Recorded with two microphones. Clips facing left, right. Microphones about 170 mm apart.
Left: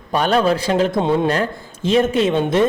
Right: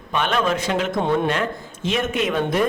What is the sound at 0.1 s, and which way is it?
Speech, 35° left (ahead or behind).